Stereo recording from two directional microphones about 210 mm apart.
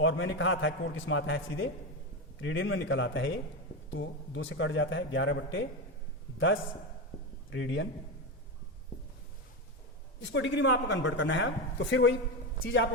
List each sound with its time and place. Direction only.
0.0 s speech: 65° left (ahead or behind)
7.5 s speech: 65° left (ahead or behind)
10.2 s a man's voice: 60° left (ahead or behind)